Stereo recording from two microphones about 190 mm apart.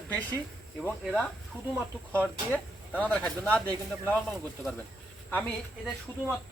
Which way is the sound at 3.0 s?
5° left (ahead or behind).